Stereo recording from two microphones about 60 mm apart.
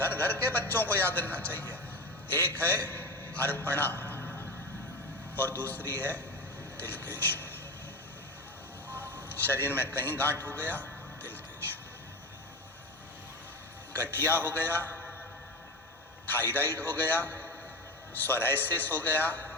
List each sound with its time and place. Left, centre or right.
0.1 s a man's voice: left
5.4 s a man's voice: left
8.9 s a man's voice: left
13.9 s a man's voice: left
16.3 s a man's voice: left